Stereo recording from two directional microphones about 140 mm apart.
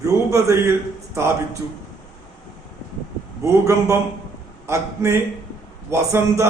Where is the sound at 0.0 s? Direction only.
20° right (ahead or behind).